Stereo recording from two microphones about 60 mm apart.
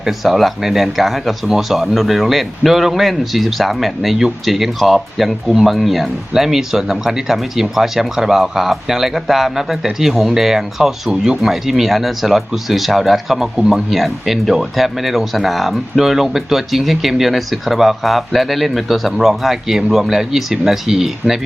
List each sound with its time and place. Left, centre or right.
0.0 s speech: centre